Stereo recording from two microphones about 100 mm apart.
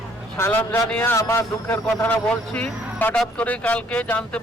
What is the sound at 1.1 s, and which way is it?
A man's voice, 25° left (ahead or behind).